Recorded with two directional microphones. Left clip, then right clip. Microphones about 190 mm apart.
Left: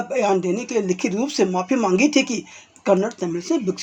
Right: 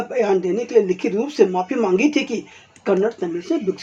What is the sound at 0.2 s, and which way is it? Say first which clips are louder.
Speech: right 2 dB; 30° left (ahead or behind).